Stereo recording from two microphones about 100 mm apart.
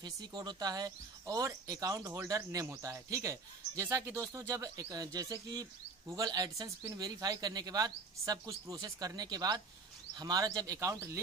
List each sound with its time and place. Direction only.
0.0 s speech: 40° right (ahead or behind)